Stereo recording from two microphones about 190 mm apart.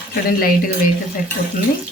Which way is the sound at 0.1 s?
50° left (ahead or behind).